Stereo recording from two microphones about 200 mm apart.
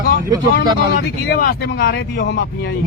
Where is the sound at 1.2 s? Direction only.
55° left (ahead or behind).